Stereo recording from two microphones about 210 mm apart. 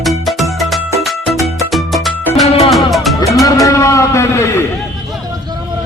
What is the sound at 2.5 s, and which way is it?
Music, 30° left (ahead or behind).